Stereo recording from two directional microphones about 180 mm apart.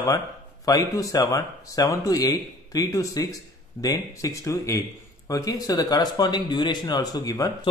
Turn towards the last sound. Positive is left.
turn(degrees=20)  # may be behind; listen again after turning